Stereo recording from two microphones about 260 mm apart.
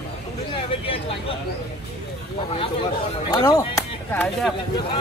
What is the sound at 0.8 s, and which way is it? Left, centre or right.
Speech, left.